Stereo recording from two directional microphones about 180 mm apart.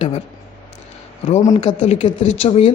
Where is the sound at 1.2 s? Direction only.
40° left (ahead or behind).